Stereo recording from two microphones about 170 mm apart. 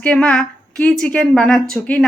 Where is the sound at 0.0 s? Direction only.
5° left (ahead or behind).